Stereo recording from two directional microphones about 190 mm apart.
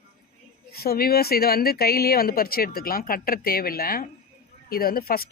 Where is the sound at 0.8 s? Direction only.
50° left (ahead or behind).